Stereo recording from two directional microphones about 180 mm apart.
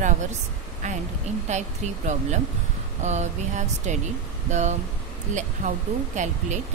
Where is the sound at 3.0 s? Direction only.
40° right (ahead or behind).